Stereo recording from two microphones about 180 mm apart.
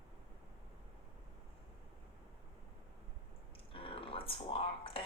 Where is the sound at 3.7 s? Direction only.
30° left (ahead or behind).